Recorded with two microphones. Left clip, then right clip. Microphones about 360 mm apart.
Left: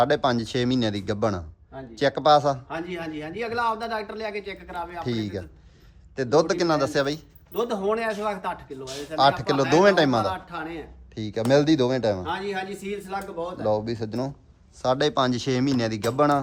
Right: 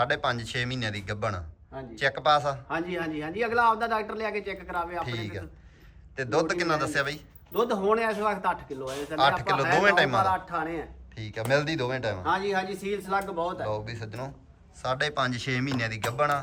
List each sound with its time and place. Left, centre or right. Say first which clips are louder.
0.0 s speech: left 5 dB; centre
2.6 s a man's voice: right 1 dB; centre
5.0 s speech: left 6 dB; centre
7.5 s a man's voice: even; centre
8.8 s speech: right 1 dB; centre
9.4 s speech: left 4 dB; centre
10.3 s a man's voice: right 4 dB; centre
11.1 s speech: left 5 dB; centre
12.3 s a man's voice: right 2 dB; centre
13.7 s speech: left 8 dB; centre